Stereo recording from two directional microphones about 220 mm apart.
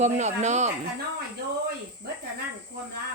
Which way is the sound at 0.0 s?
30° right (ahead or behind).